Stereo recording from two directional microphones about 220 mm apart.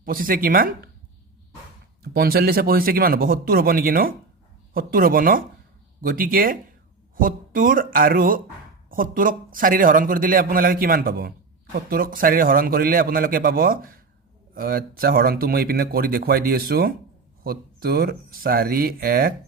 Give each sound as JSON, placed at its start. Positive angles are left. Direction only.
{"t": 0.0, "sound": "a man's voice", "side_deg": -40}
{"t": 2.0, "sound": "a man's voice", "side_deg": -45}